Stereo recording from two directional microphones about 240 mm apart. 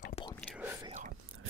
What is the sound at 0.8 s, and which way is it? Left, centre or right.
Whispering, right.